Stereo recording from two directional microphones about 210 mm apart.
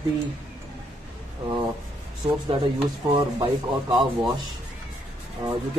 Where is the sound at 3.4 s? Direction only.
20° right (ahead or behind).